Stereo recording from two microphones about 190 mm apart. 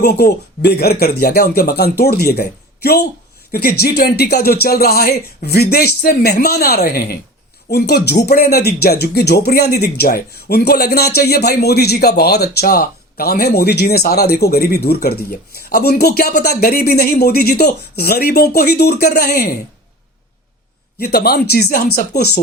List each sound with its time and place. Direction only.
0.0 s speech: 55° left (ahead or behind)
21.0 s speech: 55° left (ahead or behind)